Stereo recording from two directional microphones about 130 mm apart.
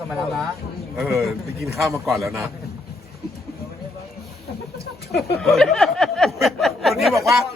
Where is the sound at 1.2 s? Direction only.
Centre (ahead or behind).